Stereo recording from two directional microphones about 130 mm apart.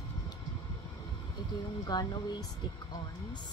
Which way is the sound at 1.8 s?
30° left (ahead or behind).